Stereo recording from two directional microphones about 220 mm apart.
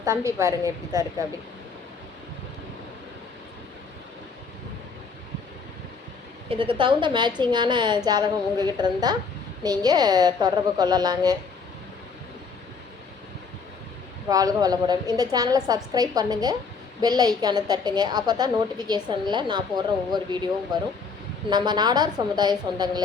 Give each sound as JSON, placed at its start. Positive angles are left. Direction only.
{"t": 0.0, "sound": "a woman's voice", "side_deg": -15}
{"t": 6.5, "sound": "a woman's voice", "side_deg": -25}
{"t": 14.3, "sound": "a woman's voice", "side_deg": -15}